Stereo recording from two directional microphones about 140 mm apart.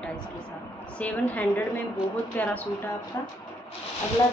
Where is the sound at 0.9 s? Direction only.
10° left (ahead or behind).